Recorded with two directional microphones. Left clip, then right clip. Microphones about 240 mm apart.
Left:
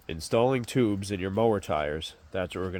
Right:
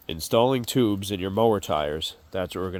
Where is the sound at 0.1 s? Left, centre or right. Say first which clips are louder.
Right 4 dB; centre.